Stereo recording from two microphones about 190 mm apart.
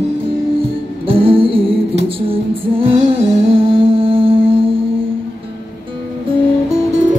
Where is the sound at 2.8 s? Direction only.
30° right (ahead or behind).